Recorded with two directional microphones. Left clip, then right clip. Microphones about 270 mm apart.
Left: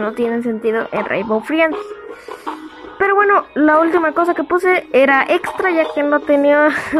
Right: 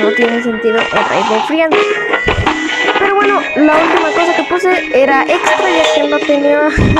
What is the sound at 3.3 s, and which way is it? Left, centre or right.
Speech, centre.